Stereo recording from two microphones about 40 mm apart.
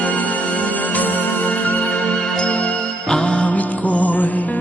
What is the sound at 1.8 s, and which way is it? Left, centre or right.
Music, left.